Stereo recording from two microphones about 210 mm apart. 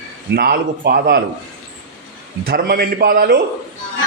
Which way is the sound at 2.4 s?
45° right (ahead or behind).